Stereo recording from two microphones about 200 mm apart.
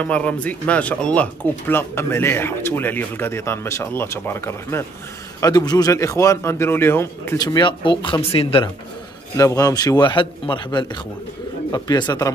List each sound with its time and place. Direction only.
0.0 s a man's voice: 5° left (ahead or behind); by 8.6 s 30° left (ahead or behind)
9.4 s a man's voice: 15° left (ahead or behind)